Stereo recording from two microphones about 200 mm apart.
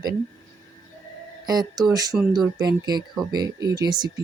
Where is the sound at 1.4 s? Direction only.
20° right (ahead or behind).